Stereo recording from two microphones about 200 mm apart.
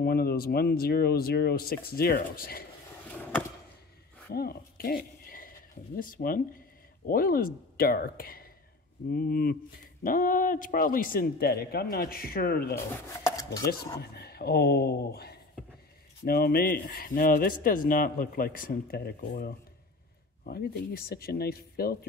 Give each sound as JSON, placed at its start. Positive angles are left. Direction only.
{"t": 0.0, "sound": "speech", "side_deg": 50}
{"t": 4.3, "sound": "speech", "side_deg": 50}
{"t": 13.9, "sound": "speech", "side_deg": 55}